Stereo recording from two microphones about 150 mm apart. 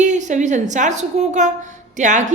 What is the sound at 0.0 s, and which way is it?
A woman's voice, 55° right (ahead or behind).